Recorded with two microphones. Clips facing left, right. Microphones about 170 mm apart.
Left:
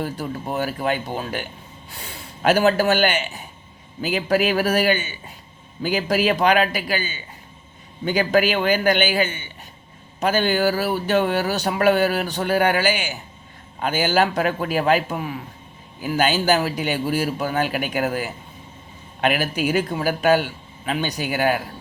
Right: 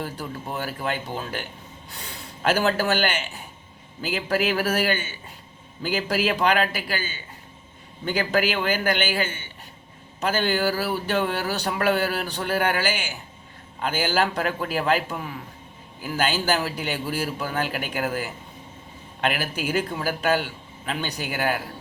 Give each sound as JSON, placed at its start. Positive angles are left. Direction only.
{"t": 0.0, "sound": "speech", "side_deg": 15}